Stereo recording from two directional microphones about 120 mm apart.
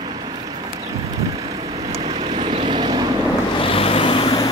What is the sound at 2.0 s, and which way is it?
Vehicle, 70° right (ahead or behind).